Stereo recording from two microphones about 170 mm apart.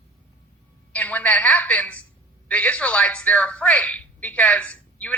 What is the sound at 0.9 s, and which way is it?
A woman's voice, 10° left (ahead or behind).